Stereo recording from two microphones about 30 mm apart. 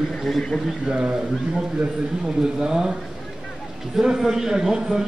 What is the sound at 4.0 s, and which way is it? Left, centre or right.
Speech, centre.